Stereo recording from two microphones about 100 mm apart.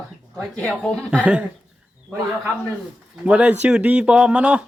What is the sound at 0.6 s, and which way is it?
Speech, 10° left (ahead or behind).